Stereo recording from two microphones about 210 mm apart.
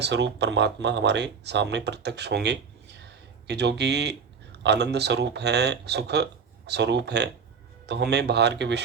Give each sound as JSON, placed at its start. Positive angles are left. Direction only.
{"t": 0.0, "sound": "speech", "side_deg": -55}